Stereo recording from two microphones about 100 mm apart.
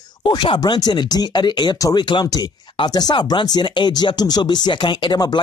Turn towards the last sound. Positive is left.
turn(degrees=45)  # may be behind; listen again after turning